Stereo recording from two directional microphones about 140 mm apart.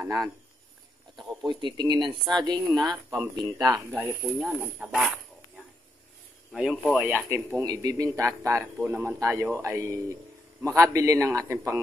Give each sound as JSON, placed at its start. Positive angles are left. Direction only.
{"t": 0.0, "sound": "speech", "side_deg": -25}
{"t": 1.1, "sound": "speech", "side_deg": -35}
{"t": 3.9, "sound": "speech", "side_deg": -10}
{"t": 6.5, "sound": "speech", "side_deg": -5}
{"t": 7.1, "sound": "speech", "side_deg": -15}